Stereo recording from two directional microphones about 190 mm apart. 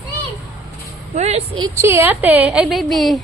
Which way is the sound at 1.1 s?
35° right (ahead or behind).